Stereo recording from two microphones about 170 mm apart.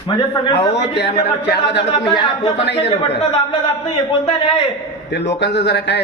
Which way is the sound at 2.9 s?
30° left (ahead or behind).